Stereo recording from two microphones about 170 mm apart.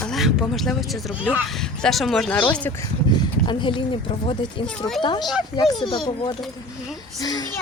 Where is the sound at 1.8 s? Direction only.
Centre (ahead or behind).